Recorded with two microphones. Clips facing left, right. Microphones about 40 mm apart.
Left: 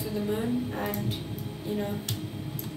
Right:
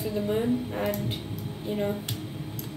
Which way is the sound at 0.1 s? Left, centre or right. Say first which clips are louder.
Right 2 dB; right.